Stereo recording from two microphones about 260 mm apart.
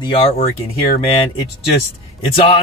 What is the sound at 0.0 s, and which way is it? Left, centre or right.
Speech, centre.